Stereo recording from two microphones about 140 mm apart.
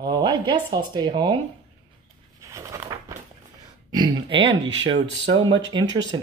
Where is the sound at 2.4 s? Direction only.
20° right (ahead or behind).